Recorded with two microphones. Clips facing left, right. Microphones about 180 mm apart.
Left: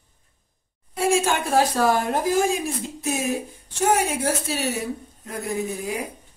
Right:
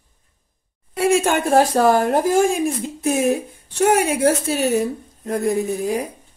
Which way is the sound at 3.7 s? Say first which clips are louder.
Right 5 dB; 65° right (ahead or behind).